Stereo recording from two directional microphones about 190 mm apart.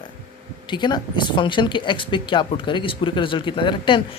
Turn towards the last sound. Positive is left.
turn(degrees=25)  # may be behind; listen again after turning